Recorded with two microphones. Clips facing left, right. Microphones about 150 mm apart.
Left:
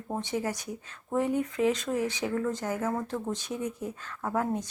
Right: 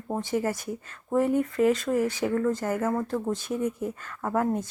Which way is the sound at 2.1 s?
45° right (ahead or behind).